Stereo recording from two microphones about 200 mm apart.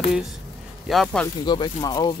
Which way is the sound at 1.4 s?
20° left (ahead or behind).